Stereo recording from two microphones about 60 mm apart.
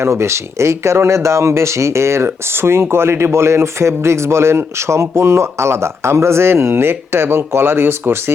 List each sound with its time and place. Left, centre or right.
0.0 s speech: right